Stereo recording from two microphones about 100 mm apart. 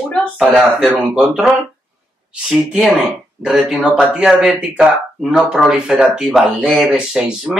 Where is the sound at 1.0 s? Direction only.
5° right (ahead or behind).